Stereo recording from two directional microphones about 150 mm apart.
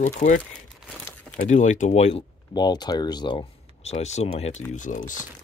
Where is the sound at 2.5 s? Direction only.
30° left (ahead or behind).